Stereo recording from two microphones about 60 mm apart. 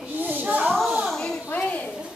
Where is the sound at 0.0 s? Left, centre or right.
Right.